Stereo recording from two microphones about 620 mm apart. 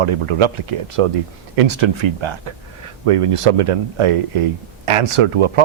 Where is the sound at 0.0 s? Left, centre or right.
Right.